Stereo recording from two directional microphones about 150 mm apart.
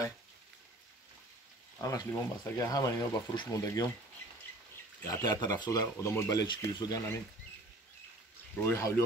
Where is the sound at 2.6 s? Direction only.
25° left (ahead or behind).